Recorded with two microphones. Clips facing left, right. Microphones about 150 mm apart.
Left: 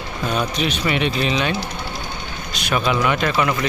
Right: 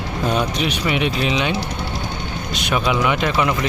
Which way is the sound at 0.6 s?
10° right (ahead or behind).